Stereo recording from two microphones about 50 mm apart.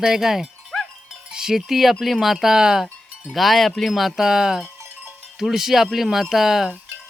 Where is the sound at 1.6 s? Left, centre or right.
Centre.